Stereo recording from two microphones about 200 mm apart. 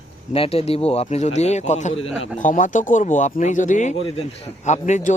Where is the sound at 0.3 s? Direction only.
30° left (ahead or behind).